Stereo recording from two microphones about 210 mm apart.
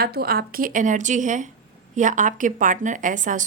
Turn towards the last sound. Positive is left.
turn(degrees=-40)  # may be behind; listen again after turning